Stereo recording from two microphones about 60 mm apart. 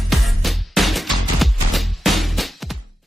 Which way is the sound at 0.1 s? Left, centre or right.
Centre.